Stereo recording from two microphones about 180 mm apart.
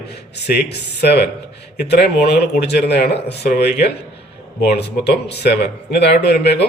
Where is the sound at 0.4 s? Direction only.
65° left (ahead or behind).